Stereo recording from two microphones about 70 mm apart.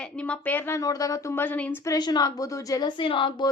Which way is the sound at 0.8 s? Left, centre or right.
Left.